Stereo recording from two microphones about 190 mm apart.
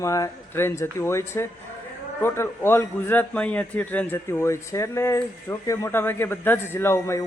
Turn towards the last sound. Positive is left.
turn(degrees=15)  # may be behind; listen again after turning